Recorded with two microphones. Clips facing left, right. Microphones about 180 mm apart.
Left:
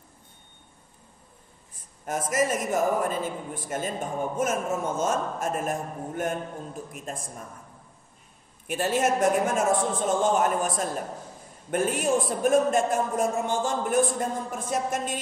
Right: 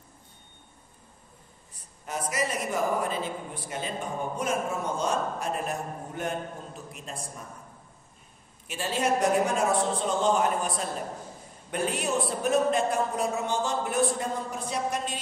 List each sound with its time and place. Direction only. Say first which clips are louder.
2.0 s a man's voice: left 5 dB; 50° left (ahead or behind)
8.6 s a man's voice: left 3 dB; 50° left (ahead or behind)